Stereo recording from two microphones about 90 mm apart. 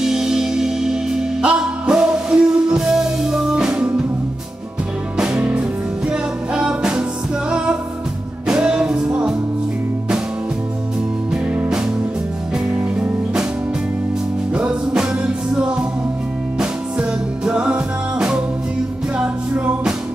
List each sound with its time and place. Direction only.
0.0 s music: 5° right (ahead or behind)
5.1 s music: 10° right (ahead or behind)
8.5 s music: 10° right (ahead or behind)
13.0 s music: 10° right (ahead or behind)
14.5 s music: 10° right (ahead or behind)
17.5 s music: 10° right (ahead or behind)